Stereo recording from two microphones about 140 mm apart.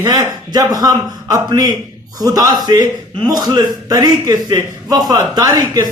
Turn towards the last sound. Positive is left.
turn(degrees=-25)  # may be behind; listen again after turning